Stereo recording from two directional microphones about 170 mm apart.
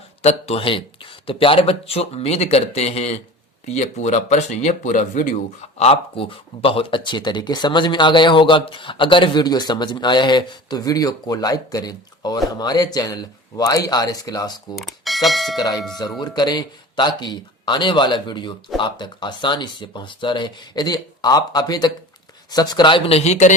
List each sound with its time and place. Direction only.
0.2 s speech: 40° left (ahead or behind); by 14.5 s 20° left (ahead or behind)
14.8 s speech: centre (ahead or behind)
15.5 s speech: 20° left (ahead or behind); by 23.6 s 45° left (ahead or behind)